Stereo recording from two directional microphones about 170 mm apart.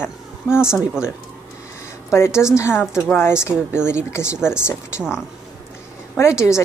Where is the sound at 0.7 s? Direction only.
5° right (ahead or behind).